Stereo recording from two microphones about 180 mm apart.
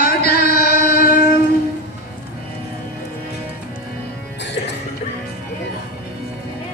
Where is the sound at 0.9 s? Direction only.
50° left (ahead or behind).